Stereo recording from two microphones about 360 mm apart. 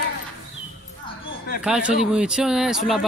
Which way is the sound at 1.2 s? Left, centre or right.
Left.